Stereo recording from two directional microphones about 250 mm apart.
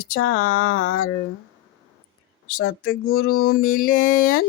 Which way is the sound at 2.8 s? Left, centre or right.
Left.